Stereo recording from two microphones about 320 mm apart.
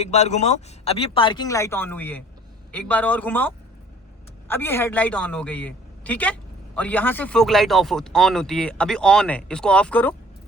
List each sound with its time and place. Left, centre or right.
0.0 s a man's voice: centre